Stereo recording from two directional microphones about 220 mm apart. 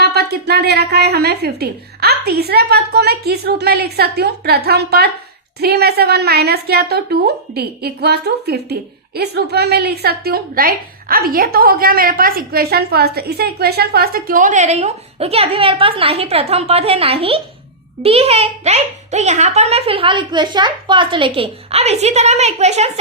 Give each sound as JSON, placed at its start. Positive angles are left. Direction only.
{"t": 0.0, "sound": "a woman's voice", "side_deg": -45}